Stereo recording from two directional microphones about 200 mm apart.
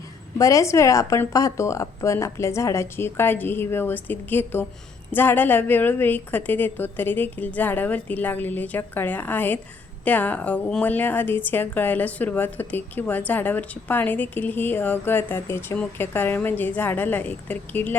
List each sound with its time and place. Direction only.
0.3 s a woman's voice: 15° left (ahead or behind)